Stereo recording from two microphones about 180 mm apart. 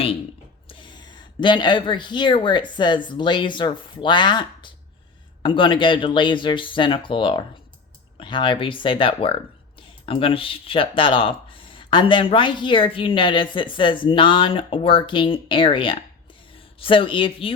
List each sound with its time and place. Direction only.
0.7 s speech: 25° left (ahead or behind)